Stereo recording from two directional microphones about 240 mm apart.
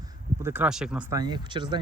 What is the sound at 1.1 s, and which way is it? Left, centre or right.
Speech, centre.